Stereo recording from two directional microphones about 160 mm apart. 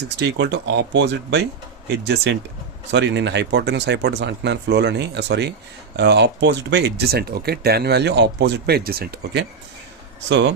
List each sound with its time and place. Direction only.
0.2 s speech: 90° right
2.9 s speech: 90° right